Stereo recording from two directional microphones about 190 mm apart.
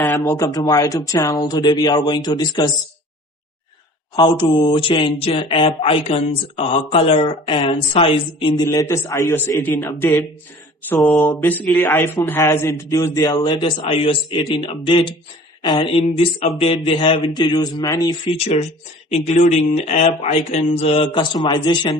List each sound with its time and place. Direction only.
0.0 s speech: 15° left (ahead or behind)
4.1 s speech: 25° left (ahead or behind)
18.3 s speech: 35° left (ahead or behind)